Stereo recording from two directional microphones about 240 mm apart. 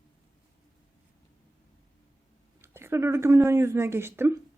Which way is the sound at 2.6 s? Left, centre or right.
Centre.